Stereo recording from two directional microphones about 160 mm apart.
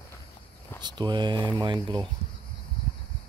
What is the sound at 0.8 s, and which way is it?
Speech, 25° right (ahead or behind).